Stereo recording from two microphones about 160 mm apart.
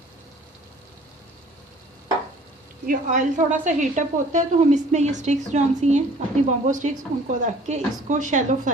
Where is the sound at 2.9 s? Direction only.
55° right (ahead or behind).